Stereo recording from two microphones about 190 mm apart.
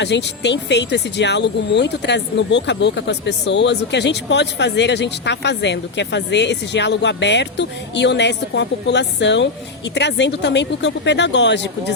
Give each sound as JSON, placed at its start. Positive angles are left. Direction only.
{"t": 0.0, "sound": "speech", "side_deg": 65}